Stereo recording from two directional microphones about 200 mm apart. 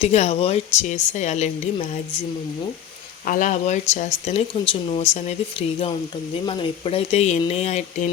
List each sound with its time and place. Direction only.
0.0 s speech: 30° left (ahead or behind)
3.2 s speech: 40° left (ahead or behind)